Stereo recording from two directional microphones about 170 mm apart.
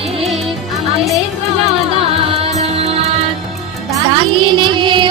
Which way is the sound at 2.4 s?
40° right (ahead or behind).